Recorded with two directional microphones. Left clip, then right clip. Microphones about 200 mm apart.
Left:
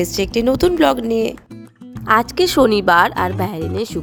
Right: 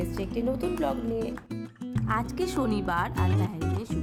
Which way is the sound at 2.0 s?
45° left (ahead or behind).